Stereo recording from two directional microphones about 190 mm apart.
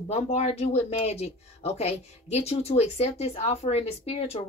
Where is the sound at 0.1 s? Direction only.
35° left (ahead or behind).